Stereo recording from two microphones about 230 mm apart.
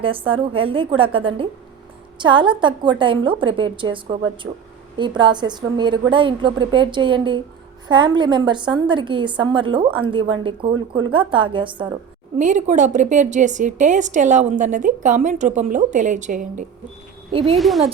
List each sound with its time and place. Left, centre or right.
0.0 s a woman's voice: right
12.4 s a woman's voice: right
17.6 s a woman's voice: centre